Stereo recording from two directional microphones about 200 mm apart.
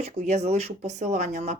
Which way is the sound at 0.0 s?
35° right (ahead or behind).